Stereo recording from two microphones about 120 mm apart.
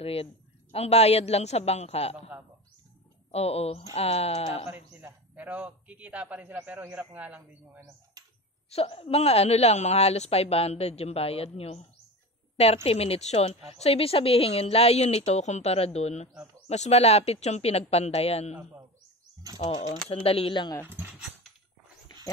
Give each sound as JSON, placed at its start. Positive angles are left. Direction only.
{"t": 0.0, "sound": "a woman's voice", "side_deg": 55}
{"t": 3.3, "sound": "a woman's voice", "side_deg": 55}
{"t": 4.6, "sound": "a man's voice", "side_deg": -15}
{"t": 8.6, "sound": "a woman's voice", "side_deg": 55}
{"t": 20.1, "sound": "speech", "side_deg": 55}
{"t": 20.8, "sound": "a man's voice", "side_deg": -15}